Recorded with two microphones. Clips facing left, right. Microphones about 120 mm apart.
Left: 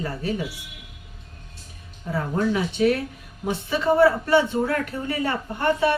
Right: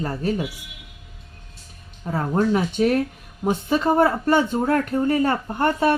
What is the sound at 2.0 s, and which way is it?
Speech, 45° right (ahead or behind).